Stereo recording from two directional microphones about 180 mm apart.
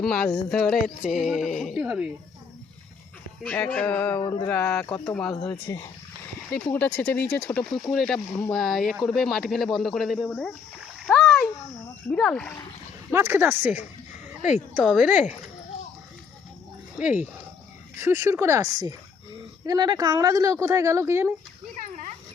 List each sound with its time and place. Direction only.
0.0 s speech: 5° left (ahead or behind)
3.4 s speech: 10° left (ahead or behind)
4.2 s speech: 25° left (ahead or behind)
4.4 s speech: 10° left (ahead or behind)
6.5 s speech: 5° left (ahead or behind)
11.0 s splash: 5° left (ahead or behind)
12.0 s speech: 5° left (ahead or behind)
13.1 s speech: 10° right (ahead or behind)
17.0 s speech: 10° right (ahead or behind)